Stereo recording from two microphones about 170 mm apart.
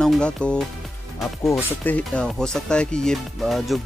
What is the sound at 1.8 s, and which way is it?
Speech, 10° left (ahead or behind).